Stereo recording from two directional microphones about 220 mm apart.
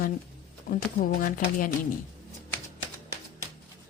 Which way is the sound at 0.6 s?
40° left (ahead or behind).